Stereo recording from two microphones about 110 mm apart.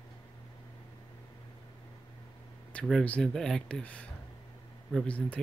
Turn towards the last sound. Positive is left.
turn(degrees=10)  # may be behind; listen again after turning